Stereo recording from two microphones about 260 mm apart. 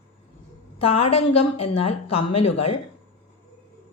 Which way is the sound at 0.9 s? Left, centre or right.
Left.